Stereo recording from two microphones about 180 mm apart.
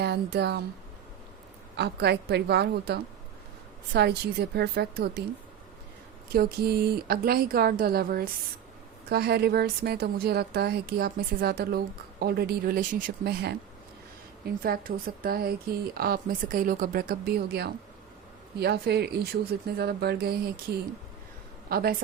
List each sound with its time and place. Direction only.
0.0 s speech: 65° right (ahead or behind)
1.7 s a woman's voice: 65° right (ahead or behind)
6.3 s a woman's voice: 55° right (ahead or behind)
21.7 s a woman's voice: 60° right (ahead or behind)